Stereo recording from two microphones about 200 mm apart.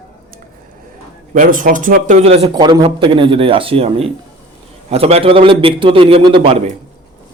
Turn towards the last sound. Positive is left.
turn(degrees=-30)  # may be behind; listen again after turning